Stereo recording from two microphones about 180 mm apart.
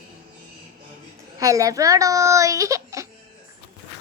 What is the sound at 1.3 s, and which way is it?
A child's voice, 20° right (ahead or behind).